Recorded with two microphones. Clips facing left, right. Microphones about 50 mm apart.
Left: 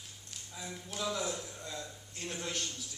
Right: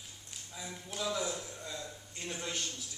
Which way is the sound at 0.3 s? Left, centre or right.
Centre.